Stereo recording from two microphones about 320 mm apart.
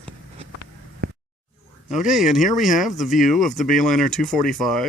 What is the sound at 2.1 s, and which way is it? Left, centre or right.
Speech, centre.